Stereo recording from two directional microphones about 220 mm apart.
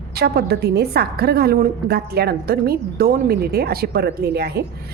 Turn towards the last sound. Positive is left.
turn(degrees=-45)  # may be behind; listen again after turning